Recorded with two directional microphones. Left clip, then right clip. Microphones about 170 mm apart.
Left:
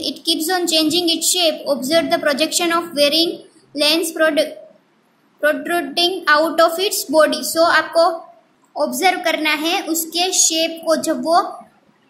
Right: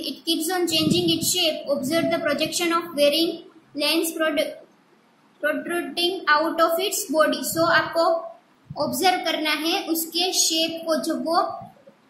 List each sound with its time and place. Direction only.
0.0 s a woman's voice: 40° left (ahead or behind)
8.7 s a woman's voice: 30° left (ahead or behind)